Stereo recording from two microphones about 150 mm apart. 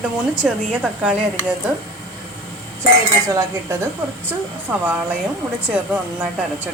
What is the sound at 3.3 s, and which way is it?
A woman's voice, 20° right (ahead or behind).